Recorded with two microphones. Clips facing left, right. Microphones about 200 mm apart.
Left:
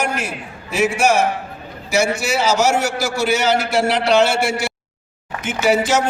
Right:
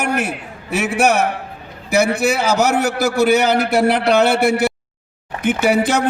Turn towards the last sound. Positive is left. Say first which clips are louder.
# right 1 dB
turn(degrees=-55)  # may be behind; listen again after turning